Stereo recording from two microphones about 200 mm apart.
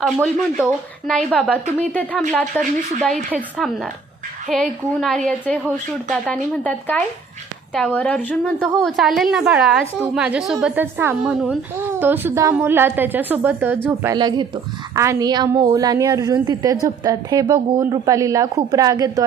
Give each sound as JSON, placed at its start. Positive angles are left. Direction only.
{"t": 0.0, "sound": "a woman's voice", "side_deg": 0}
{"t": 2.5, "sound": "a woman's voice", "side_deg": -10}